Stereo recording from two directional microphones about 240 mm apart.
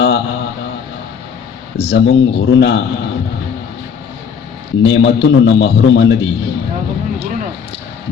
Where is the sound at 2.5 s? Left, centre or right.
Left.